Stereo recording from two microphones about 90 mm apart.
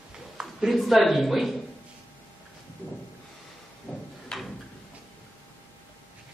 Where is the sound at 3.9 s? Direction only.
10° left (ahead or behind).